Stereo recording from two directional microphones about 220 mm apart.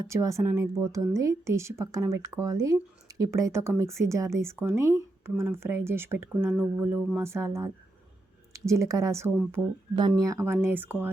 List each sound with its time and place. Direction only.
0.1 s speech: 15° right (ahead or behind)